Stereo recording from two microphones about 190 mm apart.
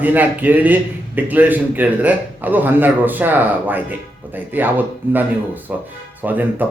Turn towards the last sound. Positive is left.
turn(degrees=-10)  # may be behind; listen again after turning